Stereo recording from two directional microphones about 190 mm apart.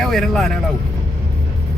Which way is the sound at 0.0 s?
Centre (ahead or behind).